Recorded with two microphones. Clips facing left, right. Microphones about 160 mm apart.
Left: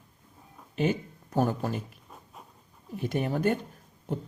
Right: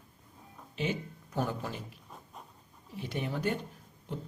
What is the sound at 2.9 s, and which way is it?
Speech, 50° left (ahead or behind).